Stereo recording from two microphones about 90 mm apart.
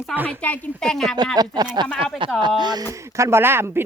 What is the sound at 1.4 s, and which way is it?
Speech, 50° right (ahead or behind).